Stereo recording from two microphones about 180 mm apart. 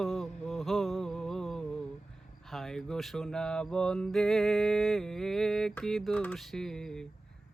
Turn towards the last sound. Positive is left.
turn(degrees=5)  # may be behind; listen again after turning